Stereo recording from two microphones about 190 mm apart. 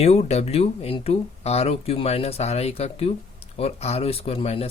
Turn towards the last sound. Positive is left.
turn(degrees=30)  # may be behind; listen again after turning